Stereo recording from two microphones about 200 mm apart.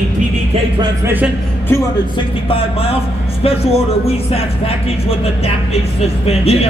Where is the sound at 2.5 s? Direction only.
30° left (ahead or behind).